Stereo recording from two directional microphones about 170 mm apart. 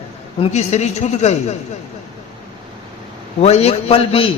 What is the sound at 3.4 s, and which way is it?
Speech, 40° left (ahead or behind).